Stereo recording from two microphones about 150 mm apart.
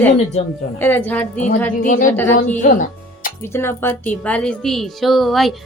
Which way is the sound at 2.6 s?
60° left (ahead or behind).